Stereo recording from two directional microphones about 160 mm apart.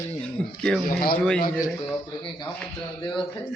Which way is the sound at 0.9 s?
70° left (ahead or behind).